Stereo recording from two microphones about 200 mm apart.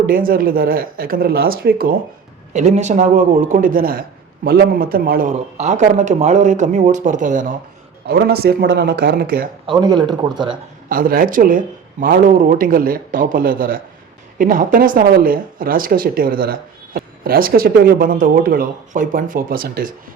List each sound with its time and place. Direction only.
0.0 s speech: 45° right (ahead or behind)
2.5 s speech: 35° right (ahead or behind)
8.0 s speech: 50° right (ahead or behind)
9.8 s speech: 20° right (ahead or behind)
10.8 s speech: 45° right (ahead or behind)